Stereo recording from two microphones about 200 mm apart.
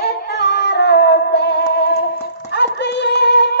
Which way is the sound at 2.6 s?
55° left (ahead or behind).